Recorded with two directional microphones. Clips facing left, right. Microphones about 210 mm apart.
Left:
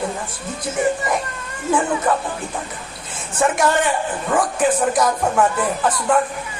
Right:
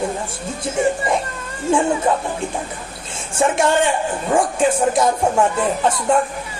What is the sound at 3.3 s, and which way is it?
A woman's voice, 25° right (ahead or behind).